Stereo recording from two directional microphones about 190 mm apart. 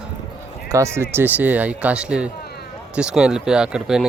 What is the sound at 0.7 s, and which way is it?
Speech, 15° right (ahead or behind).